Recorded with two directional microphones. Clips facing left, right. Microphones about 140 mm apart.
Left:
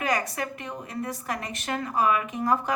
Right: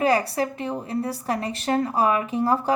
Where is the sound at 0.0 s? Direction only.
30° right (ahead or behind).